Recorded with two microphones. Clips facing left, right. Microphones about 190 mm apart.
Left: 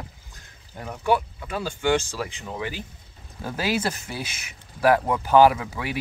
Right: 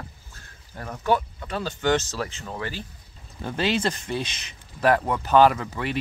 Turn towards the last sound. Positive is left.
turn(degrees=5)  # may be behind; listen again after turning